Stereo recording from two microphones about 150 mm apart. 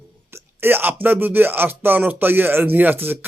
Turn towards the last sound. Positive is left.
turn(degrees=-15)  # may be behind; listen again after turning